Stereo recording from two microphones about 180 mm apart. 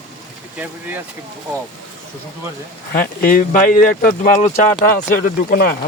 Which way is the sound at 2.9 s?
50° left (ahead or behind).